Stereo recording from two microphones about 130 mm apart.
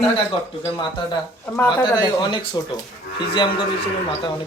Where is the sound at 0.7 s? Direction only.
35° left (ahead or behind).